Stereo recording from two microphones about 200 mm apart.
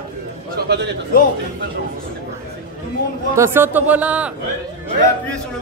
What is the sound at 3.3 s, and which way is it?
A man's voice, 10° right (ahead or behind).